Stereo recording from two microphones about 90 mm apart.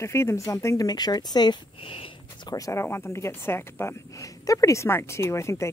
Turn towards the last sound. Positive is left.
turn(degrees=30)  # may be behind; listen again after turning